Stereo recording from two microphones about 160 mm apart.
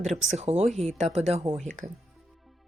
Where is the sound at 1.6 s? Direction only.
50° right (ahead or behind).